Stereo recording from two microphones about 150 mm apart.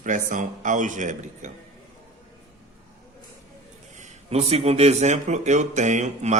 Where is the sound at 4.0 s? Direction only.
45° right (ahead or behind).